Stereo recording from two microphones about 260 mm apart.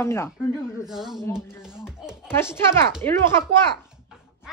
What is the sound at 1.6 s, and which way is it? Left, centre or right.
Music, centre.